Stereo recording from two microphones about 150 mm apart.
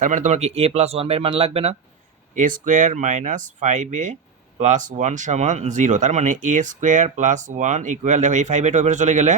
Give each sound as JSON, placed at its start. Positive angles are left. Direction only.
{"t": 0.0, "sound": "speech", "side_deg": -55}
{"t": 2.3, "sound": "speech", "side_deg": -60}